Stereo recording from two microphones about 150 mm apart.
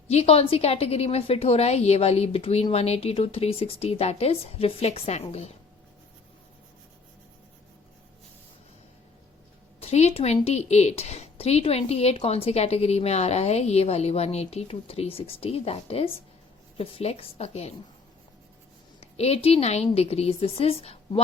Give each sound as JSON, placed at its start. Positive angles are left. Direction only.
{"t": 0.1, "sound": "speech", "side_deg": 40}
{"t": 9.8, "sound": "a woman's voice", "side_deg": 45}
{"t": 18.9, "sound": "speech", "side_deg": 45}